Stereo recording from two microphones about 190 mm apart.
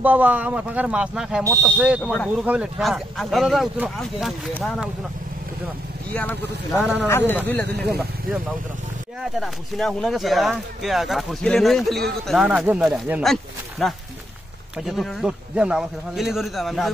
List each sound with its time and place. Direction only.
0.0 s speech: 10° right (ahead or behind)
1.4 s speech: 15° right (ahead or behind)
2.2 s speech: 5° right (ahead or behind)
6.8 s speech: 5° right (ahead or behind)
7.1 s speech: 10° left (ahead or behind)
9.2 s speech: centre (ahead or behind)